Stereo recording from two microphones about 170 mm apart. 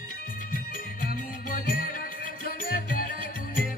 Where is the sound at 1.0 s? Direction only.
55° left (ahead or behind).